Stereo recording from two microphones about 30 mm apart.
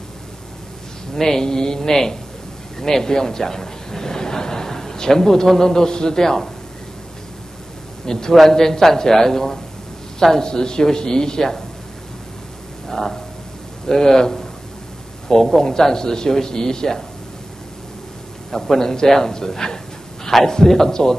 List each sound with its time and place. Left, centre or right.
1.1 s a man's voice: centre
8.0 s a man's voice: centre
13.8 s a man's voice: centre
18.5 s a man's voice: centre